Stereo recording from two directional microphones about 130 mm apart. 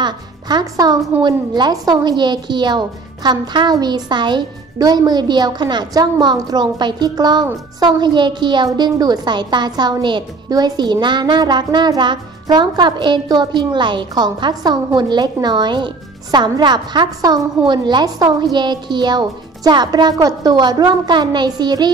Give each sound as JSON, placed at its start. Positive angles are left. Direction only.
{"t": 0.0, "sound": "a woman's voice", "side_deg": -35}